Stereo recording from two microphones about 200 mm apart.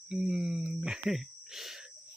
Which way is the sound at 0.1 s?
5° right (ahead or behind).